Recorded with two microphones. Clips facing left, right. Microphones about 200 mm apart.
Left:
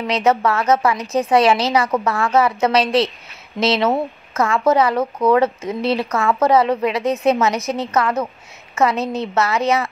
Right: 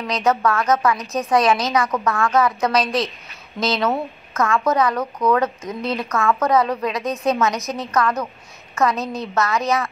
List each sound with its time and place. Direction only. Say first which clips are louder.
0.0 s a woman's voice: left 2 dB; 25° left (ahead or behind)